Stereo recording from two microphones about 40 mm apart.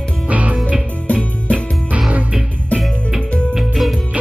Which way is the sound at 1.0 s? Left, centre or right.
Left.